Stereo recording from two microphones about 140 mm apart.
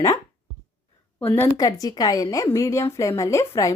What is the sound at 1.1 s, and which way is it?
Speech, 15° left (ahead or behind).